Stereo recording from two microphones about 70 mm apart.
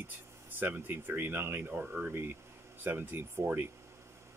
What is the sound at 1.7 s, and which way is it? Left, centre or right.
Speech, centre.